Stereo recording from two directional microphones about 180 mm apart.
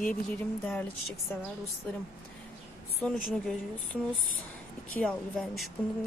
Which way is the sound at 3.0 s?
5° left (ahead or behind).